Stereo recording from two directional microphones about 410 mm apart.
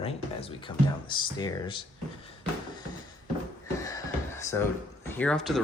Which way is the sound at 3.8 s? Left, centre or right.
Centre.